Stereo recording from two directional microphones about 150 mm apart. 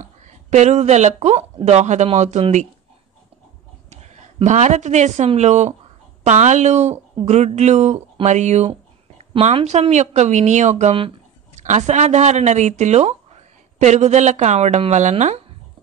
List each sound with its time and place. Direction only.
0.0 s speech: 50° right (ahead or behind)
3.9 s speech: 45° right (ahead or behind)
11.6 s speech: 50° right (ahead or behind)